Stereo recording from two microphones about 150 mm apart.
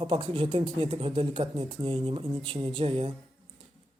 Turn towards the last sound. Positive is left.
turn(degrees=-40)  # may be behind; listen again after turning